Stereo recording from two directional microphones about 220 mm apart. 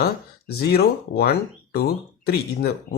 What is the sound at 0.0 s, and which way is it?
Speech, 45° left (ahead or behind).